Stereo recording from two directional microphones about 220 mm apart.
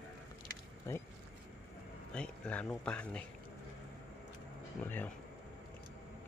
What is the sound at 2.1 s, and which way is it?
Speech, 5° left (ahead or behind).